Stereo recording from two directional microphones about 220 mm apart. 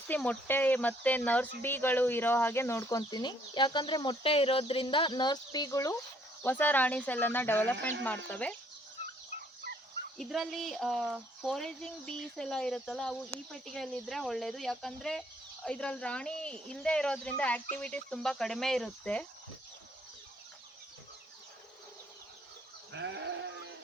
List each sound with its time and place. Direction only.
0.1 s speech: 5° left (ahead or behind)
10.2 s speech: centre (ahead or behind)
22.9 s goat: 55° right (ahead or behind)